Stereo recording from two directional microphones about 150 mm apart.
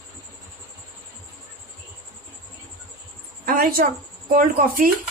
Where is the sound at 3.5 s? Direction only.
70° right (ahead or behind).